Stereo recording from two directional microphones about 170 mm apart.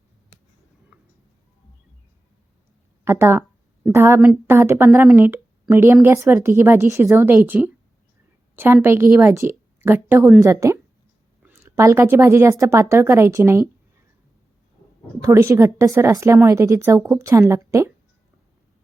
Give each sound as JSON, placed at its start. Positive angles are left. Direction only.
{"t": 3.0, "sound": "speech", "side_deg": -15}
{"t": 15.2, "sound": "speech", "side_deg": -20}